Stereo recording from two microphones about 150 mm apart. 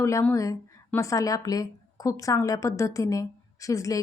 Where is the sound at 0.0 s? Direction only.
20° left (ahead or behind).